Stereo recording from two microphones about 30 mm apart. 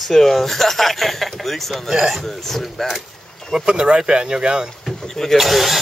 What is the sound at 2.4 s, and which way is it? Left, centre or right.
Speech, centre.